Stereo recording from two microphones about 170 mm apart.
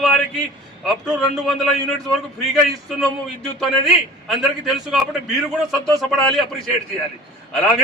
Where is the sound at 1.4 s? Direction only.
Centre (ahead or behind).